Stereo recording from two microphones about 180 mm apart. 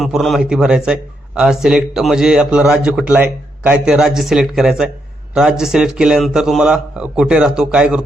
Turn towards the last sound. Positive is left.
turn(degrees=-5)  # may be behind; listen again after turning